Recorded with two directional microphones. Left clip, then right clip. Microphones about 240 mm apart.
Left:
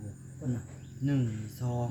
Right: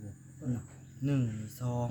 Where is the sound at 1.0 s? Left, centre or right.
Right.